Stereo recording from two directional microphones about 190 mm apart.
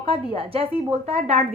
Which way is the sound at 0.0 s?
30° right (ahead or behind).